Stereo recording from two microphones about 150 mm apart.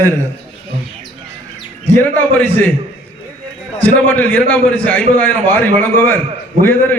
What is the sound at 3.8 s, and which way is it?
A man's voice, 10° left (ahead or behind).